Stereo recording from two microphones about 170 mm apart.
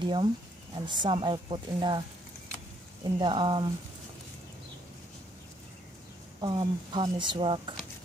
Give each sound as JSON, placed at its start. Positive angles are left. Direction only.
{"t": 0.0, "sound": "a woman's voice", "side_deg": -30}
{"t": 6.4, "sound": "a woman's voice", "side_deg": -25}